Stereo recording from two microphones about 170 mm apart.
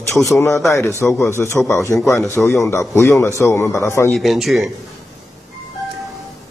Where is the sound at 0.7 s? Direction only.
15° left (ahead or behind).